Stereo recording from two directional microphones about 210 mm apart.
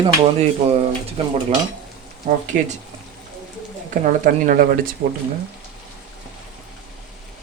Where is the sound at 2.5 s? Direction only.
40° right (ahead or behind).